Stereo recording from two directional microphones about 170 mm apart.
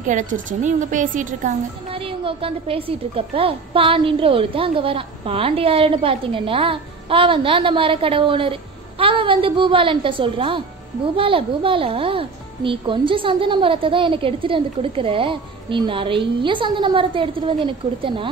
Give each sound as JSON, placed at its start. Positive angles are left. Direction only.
{"t": 0.0, "sound": "a woman's voice", "side_deg": -50}
{"t": 1.9, "sound": "a woman's voice", "side_deg": -35}